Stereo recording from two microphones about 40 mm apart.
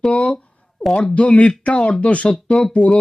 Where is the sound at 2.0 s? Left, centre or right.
Left.